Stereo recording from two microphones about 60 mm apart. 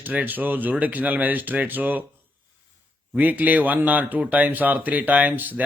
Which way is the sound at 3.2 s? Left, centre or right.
Right.